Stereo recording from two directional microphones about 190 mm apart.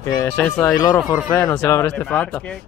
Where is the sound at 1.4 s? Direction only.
15° left (ahead or behind).